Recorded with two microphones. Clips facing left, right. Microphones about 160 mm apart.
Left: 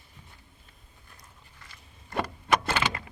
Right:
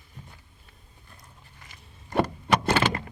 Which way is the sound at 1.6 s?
20° right (ahead or behind).